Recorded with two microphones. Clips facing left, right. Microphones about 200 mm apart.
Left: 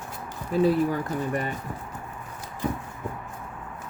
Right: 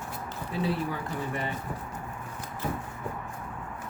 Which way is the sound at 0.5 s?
45° left (ahead or behind).